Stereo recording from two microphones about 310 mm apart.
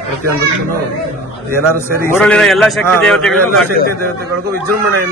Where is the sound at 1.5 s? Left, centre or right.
Centre.